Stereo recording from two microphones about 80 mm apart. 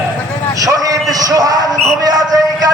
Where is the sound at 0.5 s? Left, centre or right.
Right.